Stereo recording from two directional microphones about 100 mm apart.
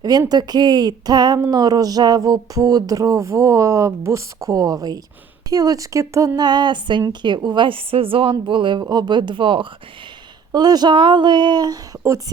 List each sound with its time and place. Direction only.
0.0 s a woman's voice: 40° right (ahead or behind)
1.4 s music: 40° right (ahead or behind)
7.1 s a woman's voice: 50° right (ahead or behind)
10.5 s a woman's voice: 45° right (ahead or behind)